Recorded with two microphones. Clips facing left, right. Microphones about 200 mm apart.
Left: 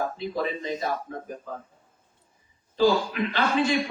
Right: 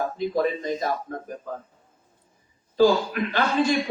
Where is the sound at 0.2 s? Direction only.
45° right (ahead or behind).